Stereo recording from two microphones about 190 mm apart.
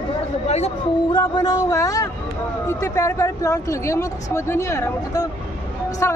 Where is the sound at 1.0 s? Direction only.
20° left (ahead or behind).